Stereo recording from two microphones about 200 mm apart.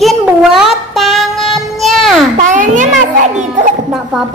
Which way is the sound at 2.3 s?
40° right (ahead or behind).